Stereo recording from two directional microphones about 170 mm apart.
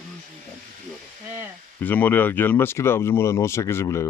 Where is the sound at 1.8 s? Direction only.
10° left (ahead or behind).